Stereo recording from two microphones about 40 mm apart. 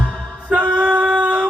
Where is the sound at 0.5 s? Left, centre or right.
Right.